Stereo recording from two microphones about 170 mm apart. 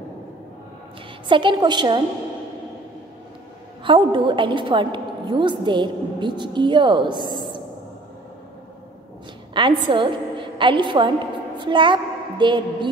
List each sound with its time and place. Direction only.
1.3 s a woman's voice: 25° right (ahead or behind)
3.8 s a woman's voice: 30° right (ahead or behind)
9.5 s a woman's voice: 30° right (ahead or behind)